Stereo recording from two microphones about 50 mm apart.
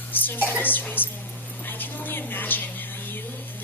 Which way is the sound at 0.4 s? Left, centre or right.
Left.